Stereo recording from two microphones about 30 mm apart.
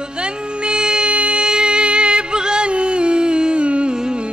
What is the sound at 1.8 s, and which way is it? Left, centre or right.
Music, right.